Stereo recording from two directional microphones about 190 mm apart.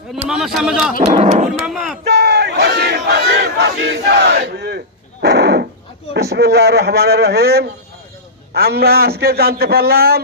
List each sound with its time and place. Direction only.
0.3 s a man's voice: centre (ahead or behind)
1.0 s speech: 40° right (ahead or behind)
1.6 s a man's voice: centre (ahead or behind)
2.0 s battle cry: 60° right (ahead or behind)
5.2 s speech: 60° right (ahead or behind)
6.1 s battle cry: 60° right (ahead or behind)